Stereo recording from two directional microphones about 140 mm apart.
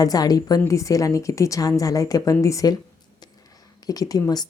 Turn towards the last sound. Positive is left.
turn(degrees=25)  # may be behind; listen again after turning